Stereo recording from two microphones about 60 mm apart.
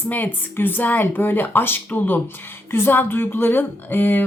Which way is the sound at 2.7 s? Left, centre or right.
Left.